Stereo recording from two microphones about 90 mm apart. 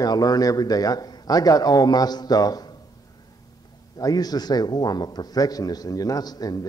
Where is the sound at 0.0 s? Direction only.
45° left (ahead or behind).